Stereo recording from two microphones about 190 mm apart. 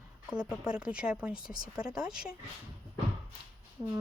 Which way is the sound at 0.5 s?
5° right (ahead or behind).